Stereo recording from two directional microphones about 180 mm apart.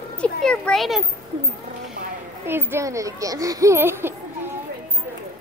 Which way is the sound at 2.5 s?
10° right (ahead or behind).